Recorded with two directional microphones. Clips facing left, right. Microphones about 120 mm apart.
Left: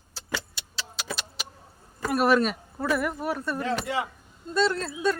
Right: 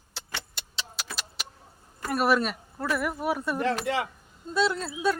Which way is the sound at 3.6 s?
75° right (ahead or behind).